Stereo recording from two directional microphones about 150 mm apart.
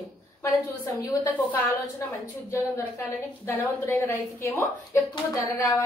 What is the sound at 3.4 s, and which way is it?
A woman's voice, 15° left (ahead or behind).